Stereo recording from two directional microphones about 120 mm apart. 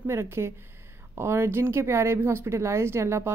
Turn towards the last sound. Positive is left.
turn(degrees=-20)  # may be behind; listen again after turning